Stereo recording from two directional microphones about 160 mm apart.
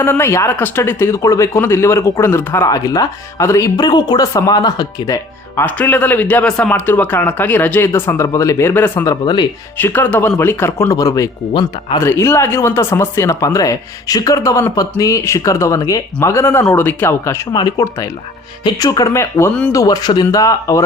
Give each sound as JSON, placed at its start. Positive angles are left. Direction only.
{"t": 0.0, "sound": "speech", "side_deg": 15}
{"t": 9.2, "sound": "speech", "side_deg": 25}
{"t": 9.7, "sound": "speech", "side_deg": 10}
{"t": 19.7, "sound": "speech", "side_deg": 20}